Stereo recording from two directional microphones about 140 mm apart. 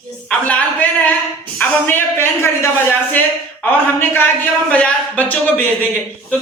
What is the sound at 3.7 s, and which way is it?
A woman's voice, 15° left (ahead or behind).